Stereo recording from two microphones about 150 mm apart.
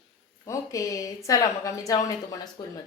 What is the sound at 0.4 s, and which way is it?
A woman's voice, 20° left (ahead or behind).